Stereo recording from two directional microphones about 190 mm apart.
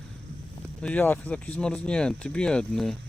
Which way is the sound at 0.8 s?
5° left (ahead or behind).